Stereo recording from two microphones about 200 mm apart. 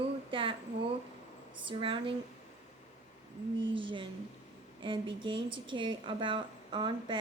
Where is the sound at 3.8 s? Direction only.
25° right (ahead or behind).